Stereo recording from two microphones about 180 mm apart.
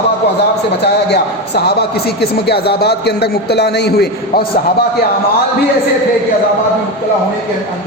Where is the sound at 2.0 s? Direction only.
60° left (ahead or behind).